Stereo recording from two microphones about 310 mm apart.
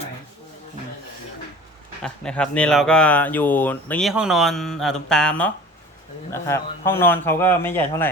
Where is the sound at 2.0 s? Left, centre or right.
Centre.